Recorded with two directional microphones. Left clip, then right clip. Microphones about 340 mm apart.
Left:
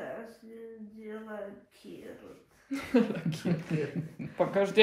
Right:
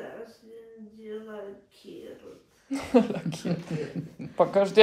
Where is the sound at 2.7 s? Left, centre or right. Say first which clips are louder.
Right 5 dB; centre.